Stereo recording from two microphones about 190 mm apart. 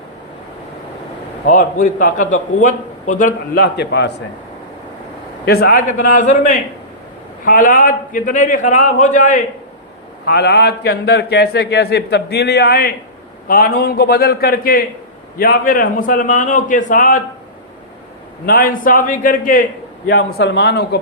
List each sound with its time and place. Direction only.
1.5 s a man's voice: 45° left (ahead or behind); by 4.1 s 60° left (ahead or behind)
5.5 s a man's voice: 55° left (ahead or behind)
10.2 s a man's voice: 60° left (ahead or behind); by 17.2 s 45° left (ahead or behind)
18.4 s a man's voice: 50° left (ahead or behind)
20.1 s a man's voice: 60° left (ahead or behind)